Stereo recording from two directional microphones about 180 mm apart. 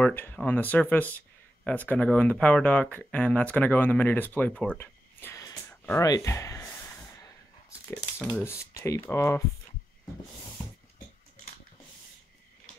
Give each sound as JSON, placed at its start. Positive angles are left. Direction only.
{"t": 0.0, "sound": "speech", "side_deg": 10}
{"t": 7.9, "sound": "speech", "side_deg": 10}